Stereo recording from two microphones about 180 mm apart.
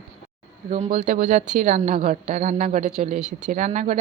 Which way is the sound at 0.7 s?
35° right (ahead or behind).